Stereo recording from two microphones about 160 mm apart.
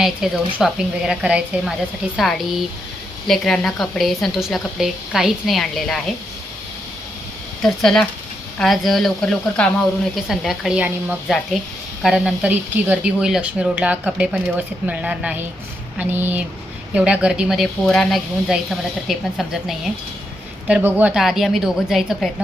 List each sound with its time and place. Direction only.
0.0 s speech: centre (ahead or behind)
7.6 s speech: 5° left (ahead or behind)